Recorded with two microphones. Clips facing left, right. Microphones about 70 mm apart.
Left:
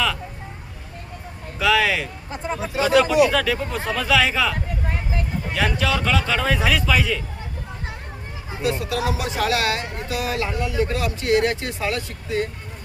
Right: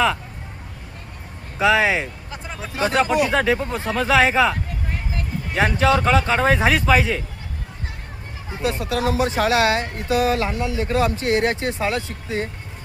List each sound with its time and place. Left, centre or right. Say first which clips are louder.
1.5 s speech: right 2 dB; right
5.5 s speech: right 5 dB; right
8.8 s speech: right 4 dB; right